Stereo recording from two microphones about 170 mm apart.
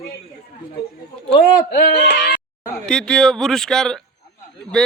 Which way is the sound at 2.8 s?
5° left (ahead or behind).